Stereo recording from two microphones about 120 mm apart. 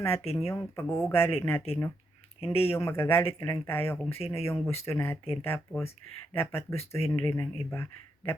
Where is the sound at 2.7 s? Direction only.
20° left (ahead or behind).